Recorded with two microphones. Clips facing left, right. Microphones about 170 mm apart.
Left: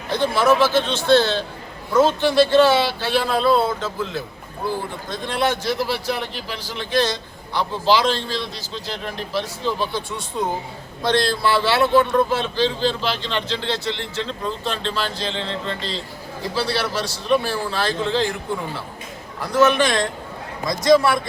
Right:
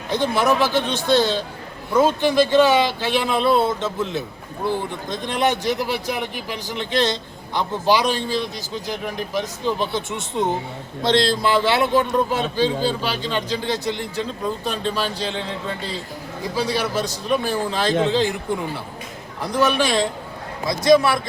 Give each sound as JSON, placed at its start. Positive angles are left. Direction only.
{"t": 0.1, "sound": "speech", "side_deg": -15}
{"t": 19.5, "sound": "speech", "side_deg": -10}